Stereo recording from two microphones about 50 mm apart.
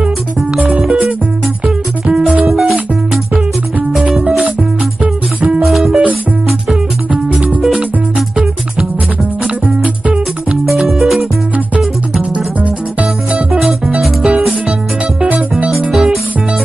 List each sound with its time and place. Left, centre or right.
0.6 s music: right
2.4 s music: centre
4.1 s music: centre
5.0 s music: right
5.6 s music: centre
7.2 s music: right
10.8 s music: centre
12.4 s music: right
13.5 s music: centre
14.2 s music: centre
15.9 s music: centre